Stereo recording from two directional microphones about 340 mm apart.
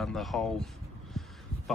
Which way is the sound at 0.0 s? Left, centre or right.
Centre.